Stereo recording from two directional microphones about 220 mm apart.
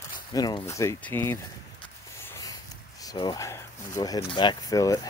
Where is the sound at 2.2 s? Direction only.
10° left (ahead or behind).